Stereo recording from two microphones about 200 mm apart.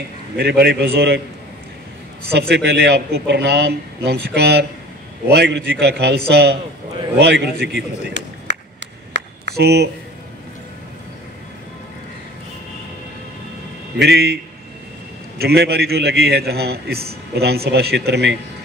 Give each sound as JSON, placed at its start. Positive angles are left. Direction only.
{"t": 0.4, "sound": "a man's voice", "side_deg": -55}
{"t": 2.3, "sound": "a man's voice", "side_deg": -55}
{"t": 7.6, "sound": "a sound", "side_deg": -60}
{"t": 13.9, "sound": "a man's voice", "side_deg": -55}